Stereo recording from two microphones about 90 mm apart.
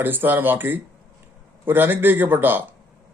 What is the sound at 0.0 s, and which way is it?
Speech, 20° right (ahead or behind).